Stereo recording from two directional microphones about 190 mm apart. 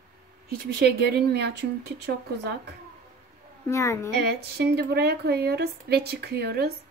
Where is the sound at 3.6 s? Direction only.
15° left (ahead or behind).